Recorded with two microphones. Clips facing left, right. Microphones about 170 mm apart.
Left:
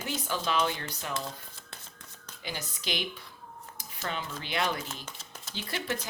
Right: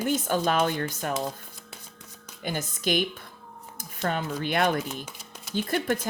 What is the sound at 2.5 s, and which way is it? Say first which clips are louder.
Speech: right 9 dB; 50° right (ahead or behind).